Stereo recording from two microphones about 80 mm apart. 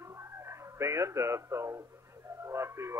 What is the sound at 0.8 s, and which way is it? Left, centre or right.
Speech, right.